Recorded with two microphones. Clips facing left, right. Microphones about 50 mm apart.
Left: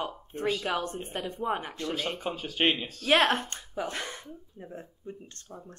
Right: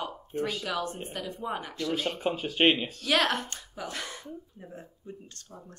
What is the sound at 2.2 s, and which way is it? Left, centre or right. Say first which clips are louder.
Speech: right 5 dB; centre.